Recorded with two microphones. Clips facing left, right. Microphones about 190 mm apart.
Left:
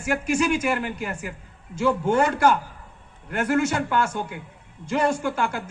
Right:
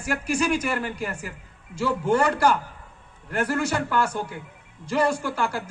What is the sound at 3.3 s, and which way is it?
A man's voice, 35° right (ahead or behind).